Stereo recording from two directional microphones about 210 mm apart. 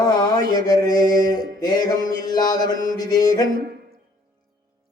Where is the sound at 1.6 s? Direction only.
20° left (ahead or behind).